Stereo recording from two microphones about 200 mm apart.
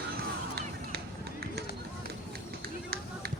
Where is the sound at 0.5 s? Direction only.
50° right (ahead or behind).